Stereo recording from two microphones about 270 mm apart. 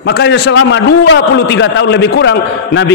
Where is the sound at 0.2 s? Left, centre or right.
Left.